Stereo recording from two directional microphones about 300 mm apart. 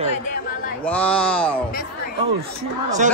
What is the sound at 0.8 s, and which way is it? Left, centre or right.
Speech, centre.